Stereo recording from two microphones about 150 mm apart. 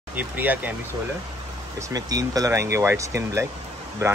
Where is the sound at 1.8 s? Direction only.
25° right (ahead or behind).